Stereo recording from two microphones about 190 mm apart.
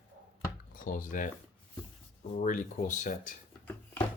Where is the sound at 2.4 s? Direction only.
40° left (ahead or behind).